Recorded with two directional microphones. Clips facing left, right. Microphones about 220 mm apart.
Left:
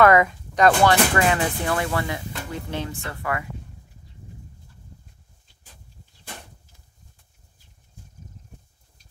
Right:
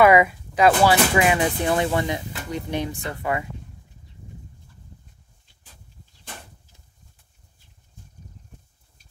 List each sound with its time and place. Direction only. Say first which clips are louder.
0.0 s speech: right 1 dB; 10° right (ahead or behind)